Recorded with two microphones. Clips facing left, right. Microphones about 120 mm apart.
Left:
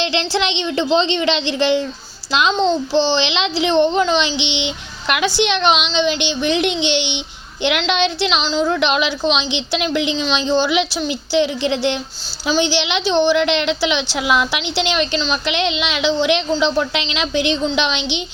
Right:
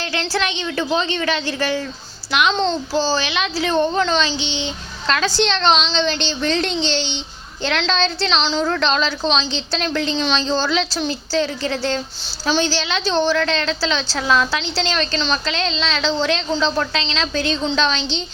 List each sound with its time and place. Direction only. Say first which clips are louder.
0.0 s a woman's voice: left 3 dB; 25° left (ahead or behind)